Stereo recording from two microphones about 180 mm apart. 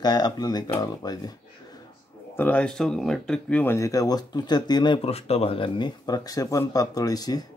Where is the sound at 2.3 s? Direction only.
10° left (ahead or behind).